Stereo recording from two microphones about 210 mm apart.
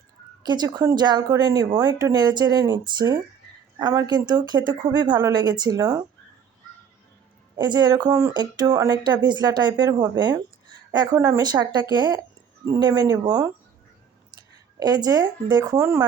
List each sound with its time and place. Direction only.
0.4 s speech: 20° right (ahead or behind)
7.5 s speech: 20° right (ahead or behind)